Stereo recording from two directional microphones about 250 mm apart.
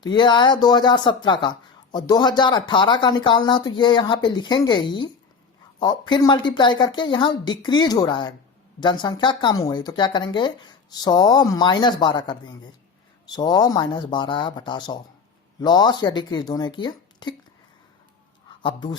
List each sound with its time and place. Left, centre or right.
0.0 s speech: centre
18.6 s speech: centre